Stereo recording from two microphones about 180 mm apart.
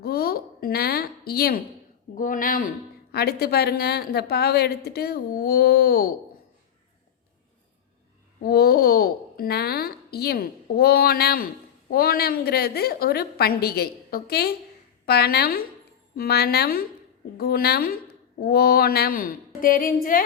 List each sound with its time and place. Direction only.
0.0 s a sound: 60° left (ahead or behind)
2.1 s a child's voice: 50° left (ahead or behind)
8.4 s a child's voice: 60° left (ahead or behind)